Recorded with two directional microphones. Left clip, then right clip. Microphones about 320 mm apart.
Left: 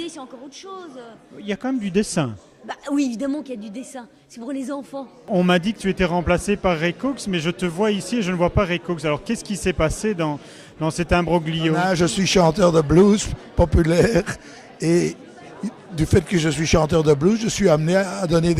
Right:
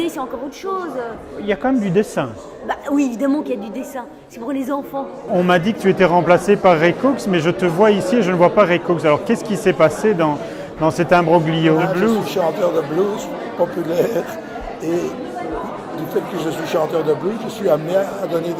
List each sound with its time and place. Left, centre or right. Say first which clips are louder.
1.5 s speech: right 8 dB; centre
2.6 s a woman's voice: right 5 dB; left
5.3 s a man's voice: right 4 dB; left
11.9 s speech: right 2 dB; left
14.8 s speech: left 2 dB; left
16.4 s speech: right 1 dB; left